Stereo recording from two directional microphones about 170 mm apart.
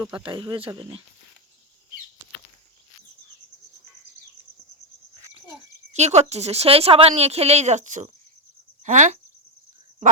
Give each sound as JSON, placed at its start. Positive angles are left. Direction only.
{"t": 0.2, "sound": "speech", "side_deg": -30}
{"t": 5.9, "sound": "speech", "side_deg": -40}